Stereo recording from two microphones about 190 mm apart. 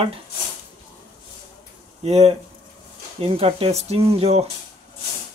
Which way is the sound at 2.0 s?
35° right (ahead or behind).